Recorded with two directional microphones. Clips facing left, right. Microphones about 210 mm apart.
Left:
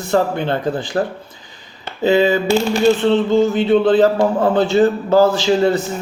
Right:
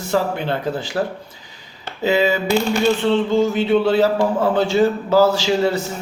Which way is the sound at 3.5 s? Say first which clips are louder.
Left 3 dB; 10° right (ahead or behind).